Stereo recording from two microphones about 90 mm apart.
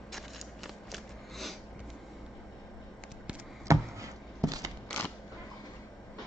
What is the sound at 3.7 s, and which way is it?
Chopping, 40° right (ahead or behind).